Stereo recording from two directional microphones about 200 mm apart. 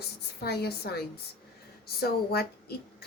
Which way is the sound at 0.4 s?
55° left (ahead or behind).